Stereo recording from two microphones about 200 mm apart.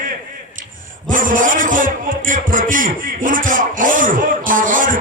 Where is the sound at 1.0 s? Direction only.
40° right (ahead or behind).